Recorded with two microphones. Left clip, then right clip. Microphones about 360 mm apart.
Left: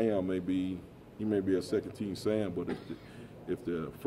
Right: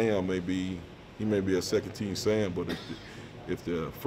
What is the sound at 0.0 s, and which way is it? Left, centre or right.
Speech, left.